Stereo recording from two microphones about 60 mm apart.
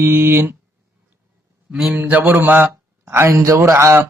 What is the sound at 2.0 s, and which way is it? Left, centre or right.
Mantra, right.